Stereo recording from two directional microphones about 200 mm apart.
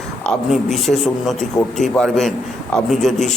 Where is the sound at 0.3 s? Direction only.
Centre (ahead or behind).